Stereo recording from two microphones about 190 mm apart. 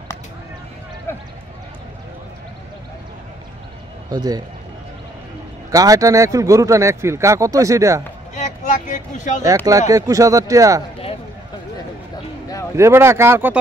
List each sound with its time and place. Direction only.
1.1 s a sound: 10° left (ahead or behind)
4.1 s a man's voice: 20° right (ahead or behind)
5.7 s speech: 20° right (ahead or behind)
8.4 s vehicle: 40° left (ahead or behind)
9.7 s speech: 20° right (ahead or behind)
12.7 s speech: 15° right (ahead or behind)